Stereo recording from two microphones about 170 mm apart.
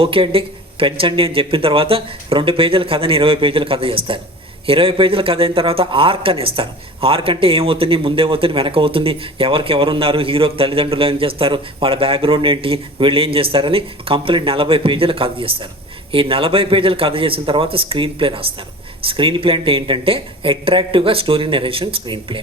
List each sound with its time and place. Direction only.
0.0 s speech: 30° right (ahead or behind)